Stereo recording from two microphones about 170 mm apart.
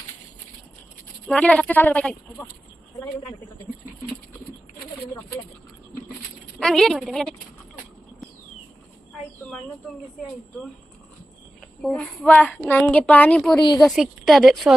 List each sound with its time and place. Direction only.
1.3 s a woman's voice: 5° left (ahead or behind)
6.6 s a woman's voice: 5° left (ahead or behind)
11.8 s a woman's voice: 5° left (ahead or behind)
13.6 s a woman's voice: 25° left (ahead or behind)
13.8 s a woman's voice: centre (ahead or behind)